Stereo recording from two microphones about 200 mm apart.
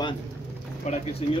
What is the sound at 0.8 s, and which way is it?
Speech, 35° left (ahead or behind).